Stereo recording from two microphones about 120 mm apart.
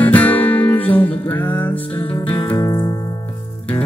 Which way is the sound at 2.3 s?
40° left (ahead or behind).